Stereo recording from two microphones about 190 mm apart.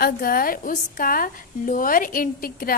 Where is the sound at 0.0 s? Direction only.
50° left (ahead or behind).